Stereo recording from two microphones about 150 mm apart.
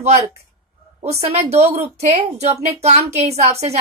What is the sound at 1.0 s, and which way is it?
A woman's voice, 45° right (ahead or behind).